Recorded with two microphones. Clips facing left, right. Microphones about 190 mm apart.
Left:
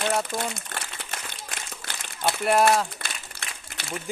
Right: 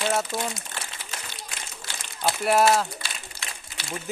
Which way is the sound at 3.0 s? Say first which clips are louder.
Even; 55° left (ahead or behind).